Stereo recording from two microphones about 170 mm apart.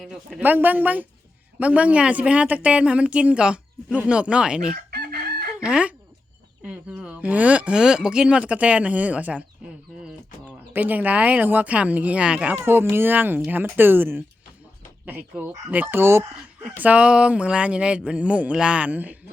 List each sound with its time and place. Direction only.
0.0 s speech: centre (ahead or behind)
4.7 s chicken: 70° right (ahead or behind)
5.5 s speech: 5° right (ahead or behind)
10.7 s speech: 10° right (ahead or behind)